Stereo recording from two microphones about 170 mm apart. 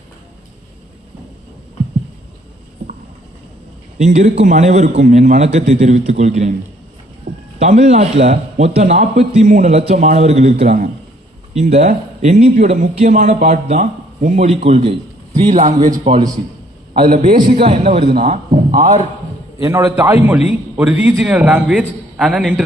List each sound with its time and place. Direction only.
3.9 s a man's voice: 45° right (ahead or behind)
7.6 s a man's voice: 45° right (ahead or behind)
17.1 s a man's voice: 55° right (ahead or behind)
17.6 s a man's voice: 40° right (ahead or behind)
19.6 s a man's voice: 20° right (ahead or behind)
20.7 s a man's voice: 10° right (ahead or behind)